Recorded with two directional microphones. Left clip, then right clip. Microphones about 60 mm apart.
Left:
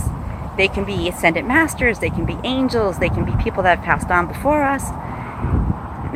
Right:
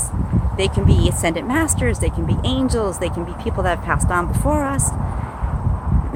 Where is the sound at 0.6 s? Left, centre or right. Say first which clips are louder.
Left 3 dB; right.